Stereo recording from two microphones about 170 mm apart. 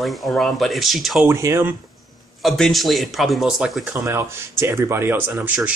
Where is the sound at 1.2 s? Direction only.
15° right (ahead or behind).